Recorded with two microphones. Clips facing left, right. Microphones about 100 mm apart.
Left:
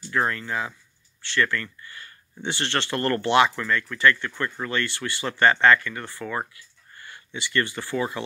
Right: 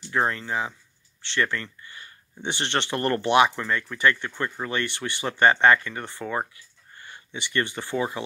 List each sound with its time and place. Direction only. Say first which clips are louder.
0.1 s speech: even; 25° right (ahead or behind)